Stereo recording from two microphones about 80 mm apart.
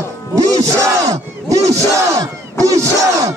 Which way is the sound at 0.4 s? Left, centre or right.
Right.